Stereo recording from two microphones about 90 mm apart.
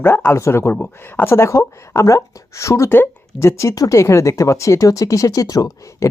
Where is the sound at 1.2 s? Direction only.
30° left (ahead or behind).